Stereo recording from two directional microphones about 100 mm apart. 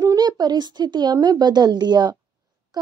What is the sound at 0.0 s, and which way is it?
A woman's voice, 40° right (ahead or behind).